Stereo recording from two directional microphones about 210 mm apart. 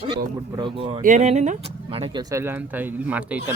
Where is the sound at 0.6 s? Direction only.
25° right (ahead or behind).